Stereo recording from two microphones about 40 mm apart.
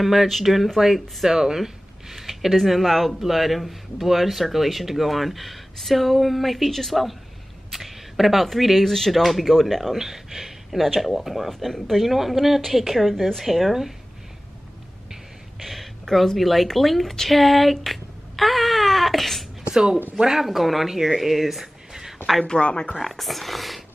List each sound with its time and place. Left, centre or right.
0.0 s speech: centre
9.9 s speech: centre
15.6 s a sound: centre
16.3 s speech: centre
19.7 s speech: centre
20.4 s speech: centre
22.5 s speech: left
22.9 s speech: centre